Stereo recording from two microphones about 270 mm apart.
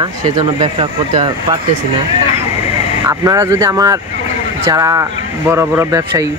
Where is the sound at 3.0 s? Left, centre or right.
Centre.